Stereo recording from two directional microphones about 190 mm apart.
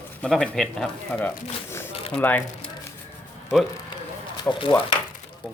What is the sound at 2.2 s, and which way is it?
Speech, 10° left (ahead or behind).